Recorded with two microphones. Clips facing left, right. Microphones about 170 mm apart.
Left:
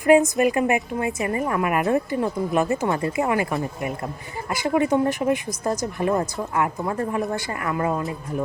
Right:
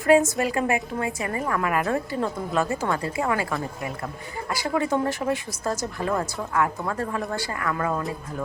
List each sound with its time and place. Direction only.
0.3 s a woman's voice: 20° left (ahead or behind)